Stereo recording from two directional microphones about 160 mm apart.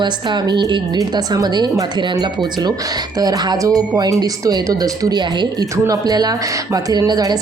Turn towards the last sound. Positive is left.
turn(degrees=-25)  # may be behind; listen again after turning